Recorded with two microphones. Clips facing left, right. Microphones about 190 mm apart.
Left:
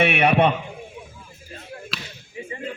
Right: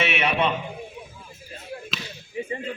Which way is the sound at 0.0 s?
55° left (ahead or behind).